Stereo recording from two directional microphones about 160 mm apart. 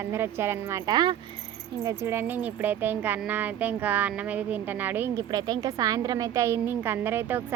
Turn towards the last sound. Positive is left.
turn(degrees=-15)  # may be behind; listen again after turning